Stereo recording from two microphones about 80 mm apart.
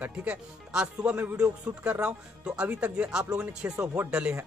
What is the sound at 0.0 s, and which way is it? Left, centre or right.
Speech, centre.